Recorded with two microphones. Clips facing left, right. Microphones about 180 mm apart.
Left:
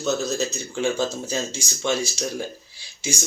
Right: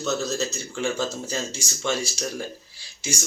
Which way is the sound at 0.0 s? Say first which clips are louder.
Left 2 dB; 15° left (ahead or behind).